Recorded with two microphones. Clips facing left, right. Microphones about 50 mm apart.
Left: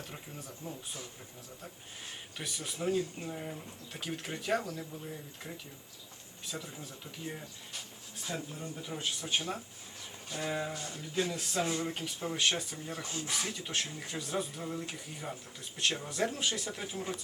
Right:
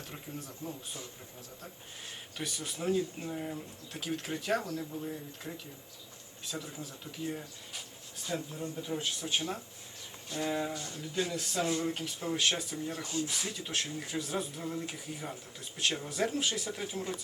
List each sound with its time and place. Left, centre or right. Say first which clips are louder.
0.1 s speech: right 2 dB; centre
2.4 s speech: even; centre